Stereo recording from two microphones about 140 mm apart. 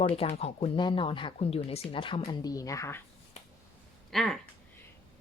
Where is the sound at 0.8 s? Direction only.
35° left (ahead or behind).